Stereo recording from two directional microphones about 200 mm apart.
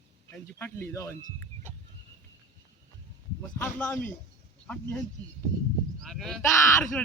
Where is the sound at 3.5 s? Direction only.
10° left (ahead or behind).